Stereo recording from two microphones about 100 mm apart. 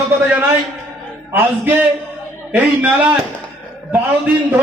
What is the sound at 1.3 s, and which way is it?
A man's voice, 20° right (ahead or behind).